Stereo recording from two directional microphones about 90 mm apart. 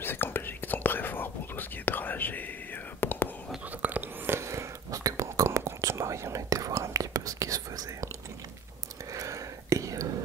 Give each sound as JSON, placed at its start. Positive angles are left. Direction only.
{"t": 0.0, "sound": "whispering", "side_deg": 25}
{"t": 3.8, "sound": "a sound", "side_deg": -20}
{"t": 4.4, "sound": "whispering", "side_deg": -35}
{"t": 9.1, "sound": "whispering", "side_deg": -35}